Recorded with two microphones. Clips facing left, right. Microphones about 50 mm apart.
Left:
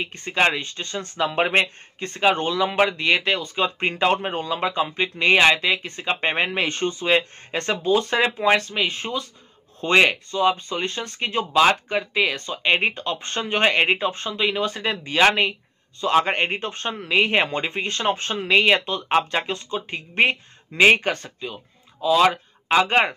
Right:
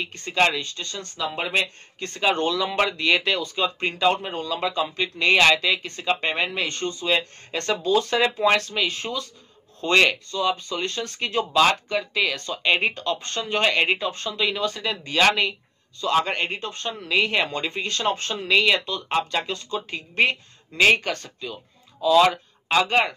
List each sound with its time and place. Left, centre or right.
0.0 s speech: left
1.1 s speech: left
2.0 s speech: centre
3.6 s speech: left
6.2 s speech: left
7.5 s speech: centre